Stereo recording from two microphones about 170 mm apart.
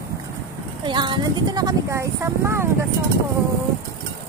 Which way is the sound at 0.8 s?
25° right (ahead or behind).